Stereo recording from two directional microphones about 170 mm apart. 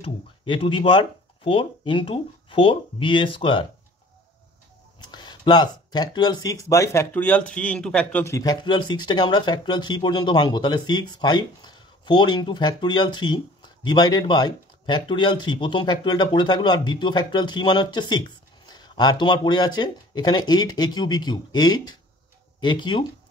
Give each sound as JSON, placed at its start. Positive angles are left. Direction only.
{"t": 0.0, "sound": "speech", "side_deg": 30}
{"t": 5.1, "sound": "speech", "side_deg": 25}